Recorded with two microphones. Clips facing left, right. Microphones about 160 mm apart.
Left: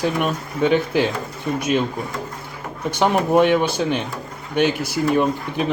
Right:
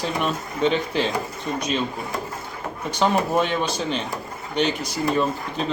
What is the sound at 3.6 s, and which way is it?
Speech, 15° left (ahead or behind).